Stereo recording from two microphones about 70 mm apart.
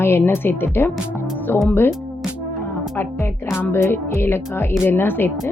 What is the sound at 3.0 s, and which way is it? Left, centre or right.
A woman's voice, left.